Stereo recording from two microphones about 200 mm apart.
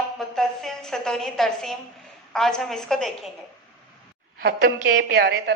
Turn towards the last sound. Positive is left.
turn(degrees=-55)  # may be behind; listen again after turning